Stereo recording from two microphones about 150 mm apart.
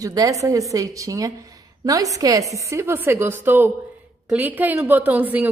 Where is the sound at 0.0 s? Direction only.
25° right (ahead or behind).